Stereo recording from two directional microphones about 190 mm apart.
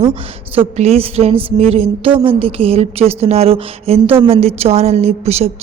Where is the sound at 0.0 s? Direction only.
30° right (ahead or behind).